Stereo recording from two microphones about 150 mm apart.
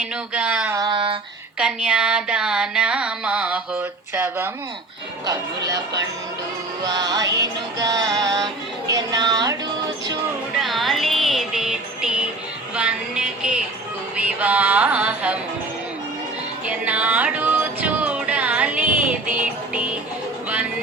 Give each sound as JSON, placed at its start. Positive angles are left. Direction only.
{"t": 0.0, "sound": "a sound", "side_deg": -5}
{"t": 0.8, "sound": "a sound", "side_deg": -35}
{"t": 1.5, "sound": "music", "side_deg": -5}
{"t": 5.2, "sound": "music", "side_deg": -25}
{"t": 8.9, "sound": "speech", "side_deg": -25}
{"t": 10.6, "sound": "music", "side_deg": 0}
{"t": 12.7, "sound": "a sound", "side_deg": -5}
{"t": 14.2, "sound": "music", "side_deg": -10}
{"t": 16.6, "sound": "music", "side_deg": -10}